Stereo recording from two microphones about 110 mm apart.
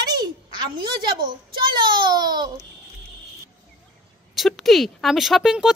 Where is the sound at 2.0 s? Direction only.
40° right (ahead or behind).